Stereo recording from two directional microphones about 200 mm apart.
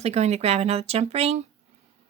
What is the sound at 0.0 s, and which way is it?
Speech, 30° right (ahead or behind).